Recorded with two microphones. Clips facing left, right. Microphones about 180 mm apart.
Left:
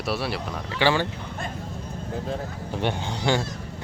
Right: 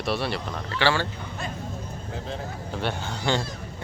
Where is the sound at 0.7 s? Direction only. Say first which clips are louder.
Left 2 dB; 15° left (ahead or behind).